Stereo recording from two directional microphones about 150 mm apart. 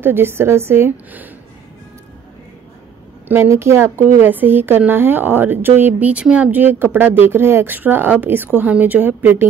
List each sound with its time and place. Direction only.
0.0 s a woman's voice: 15° right (ahead or behind)
3.3 s a woman's voice: 15° right (ahead or behind)